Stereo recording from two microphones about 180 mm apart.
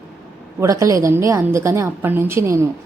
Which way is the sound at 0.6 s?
15° right (ahead or behind).